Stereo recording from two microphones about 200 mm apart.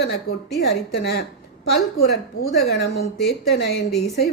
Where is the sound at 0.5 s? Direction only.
55° left (ahead or behind).